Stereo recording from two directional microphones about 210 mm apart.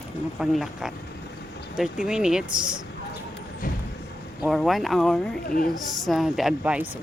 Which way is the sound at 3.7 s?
45° left (ahead or behind).